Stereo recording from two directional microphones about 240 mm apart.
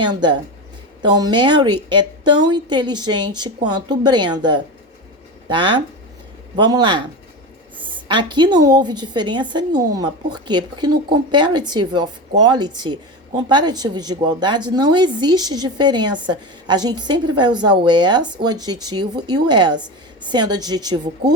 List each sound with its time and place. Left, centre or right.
0.0 s a woman's voice: centre